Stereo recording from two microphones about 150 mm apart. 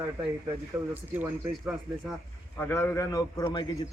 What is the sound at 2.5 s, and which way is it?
Speech, 15° left (ahead or behind).